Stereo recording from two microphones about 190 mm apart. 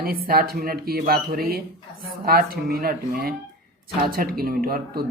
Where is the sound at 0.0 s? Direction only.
50° right (ahead or behind).